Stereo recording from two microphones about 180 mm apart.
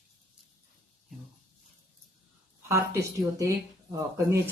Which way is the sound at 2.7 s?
15° right (ahead or behind).